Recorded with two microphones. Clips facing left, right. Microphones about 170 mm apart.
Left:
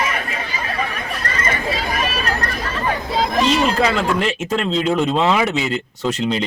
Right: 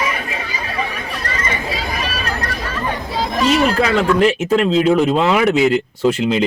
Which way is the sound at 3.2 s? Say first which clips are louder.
Right 2 dB; 20° left (ahead or behind).